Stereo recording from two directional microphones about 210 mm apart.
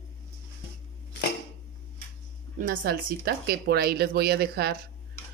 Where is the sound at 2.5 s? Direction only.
40° right (ahead or behind).